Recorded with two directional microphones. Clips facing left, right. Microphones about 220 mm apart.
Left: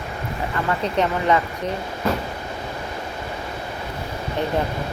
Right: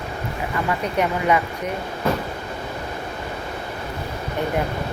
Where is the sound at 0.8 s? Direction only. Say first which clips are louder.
Left 1 dB; 10° right (ahead or behind).